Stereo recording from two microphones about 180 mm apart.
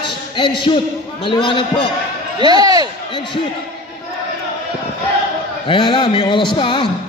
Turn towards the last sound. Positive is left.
turn(degrees=25)  # may be behind; listen again after turning